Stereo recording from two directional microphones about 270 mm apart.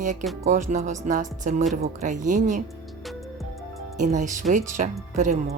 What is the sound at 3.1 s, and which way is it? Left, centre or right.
Music, centre.